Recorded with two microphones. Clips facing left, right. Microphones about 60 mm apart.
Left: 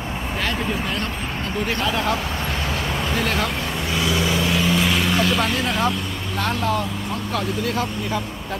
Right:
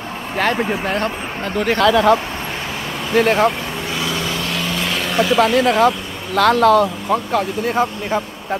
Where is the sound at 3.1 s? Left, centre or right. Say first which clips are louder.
Right 11 dB; right.